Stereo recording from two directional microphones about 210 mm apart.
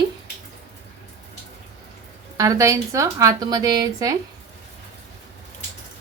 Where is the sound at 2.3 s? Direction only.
15° right (ahead or behind).